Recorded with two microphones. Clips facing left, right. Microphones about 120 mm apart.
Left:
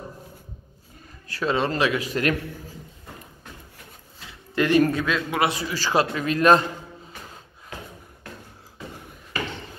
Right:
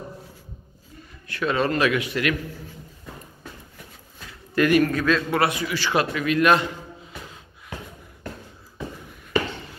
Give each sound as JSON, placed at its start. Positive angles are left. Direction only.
{"t": 1.2, "sound": "speech", "side_deg": 30}
{"t": 2.0, "sound": "a man's voice", "side_deg": 40}
{"t": 4.3, "sound": "speech", "side_deg": 25}
{"t": 5.5, "sound": "a man's voice", "side_deg": 35}